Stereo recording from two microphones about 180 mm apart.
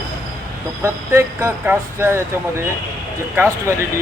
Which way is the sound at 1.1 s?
15° right (ahead or behind).